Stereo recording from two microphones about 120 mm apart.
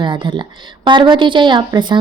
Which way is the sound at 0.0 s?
40° right (ahead or behind).